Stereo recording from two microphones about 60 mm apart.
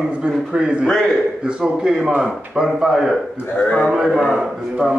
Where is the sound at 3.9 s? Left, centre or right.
Centre.